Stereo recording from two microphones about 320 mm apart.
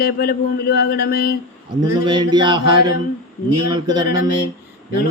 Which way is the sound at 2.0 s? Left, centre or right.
Centre.